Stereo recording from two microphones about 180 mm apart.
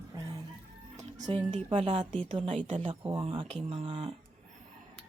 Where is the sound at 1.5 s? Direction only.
40° right (ahead or behind).